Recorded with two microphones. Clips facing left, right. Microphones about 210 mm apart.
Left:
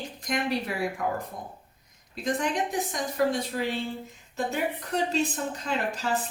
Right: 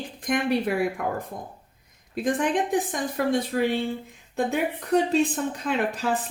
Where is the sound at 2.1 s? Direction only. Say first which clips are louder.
Right 4 dB; 55° right (ahead or behind).